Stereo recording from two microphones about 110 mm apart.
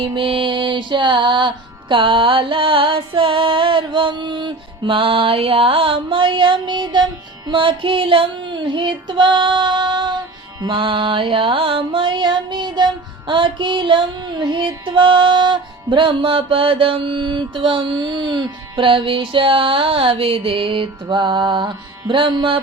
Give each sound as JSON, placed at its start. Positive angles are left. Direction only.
{"t": 0.0, "sound": "music", "side_deg": -50}